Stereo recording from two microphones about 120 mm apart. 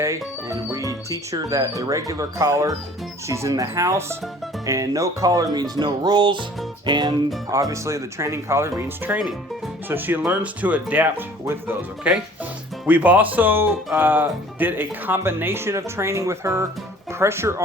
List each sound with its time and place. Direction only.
0.0 s speech: 25° right (ahead or behind)
7.5 s speech: 25° right (ahead or behind)
10.2 s speech: 10° right (ahead or behind)